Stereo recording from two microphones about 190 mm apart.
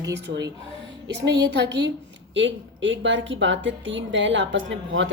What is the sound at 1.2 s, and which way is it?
A woman's voice, 65° right (ahead or behind).